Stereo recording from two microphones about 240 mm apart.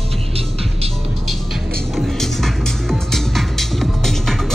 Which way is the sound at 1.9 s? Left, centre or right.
Centre.